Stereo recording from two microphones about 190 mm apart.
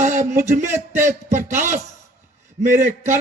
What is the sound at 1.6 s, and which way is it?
Speech, 40° right (ahead or behind).